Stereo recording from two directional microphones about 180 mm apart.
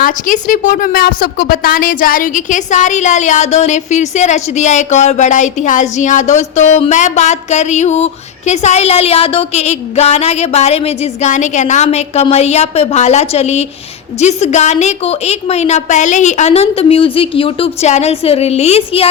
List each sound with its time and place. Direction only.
0.0 s a woman's voice: 45° left (ahead or behind)